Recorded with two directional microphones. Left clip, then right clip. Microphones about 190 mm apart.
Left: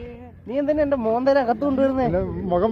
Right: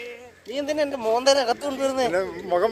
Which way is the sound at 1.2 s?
15° right (ahead or behind).